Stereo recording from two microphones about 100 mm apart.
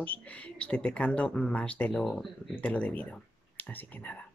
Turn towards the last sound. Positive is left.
turn(degrees=20)  # may be behind; listen again after turning